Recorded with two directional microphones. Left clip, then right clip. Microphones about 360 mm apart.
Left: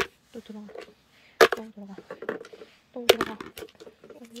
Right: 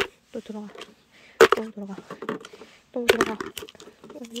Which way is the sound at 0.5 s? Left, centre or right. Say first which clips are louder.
Right 3 dB; right.